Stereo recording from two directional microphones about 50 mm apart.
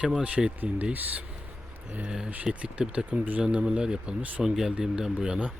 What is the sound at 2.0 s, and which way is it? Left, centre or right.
Speech, centre.